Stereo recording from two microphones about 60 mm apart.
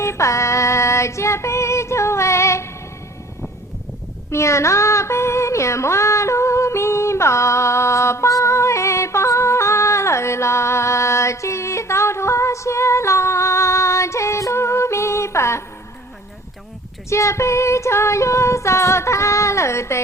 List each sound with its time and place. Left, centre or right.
0.0 s female singing: left
4.3 s music: left
17.1 s female singing: left